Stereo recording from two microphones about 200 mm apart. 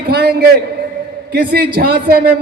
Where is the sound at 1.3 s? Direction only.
50° right (ahead or behind).